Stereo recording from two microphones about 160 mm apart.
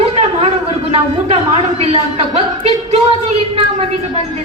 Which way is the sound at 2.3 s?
40° right (ahead or behind).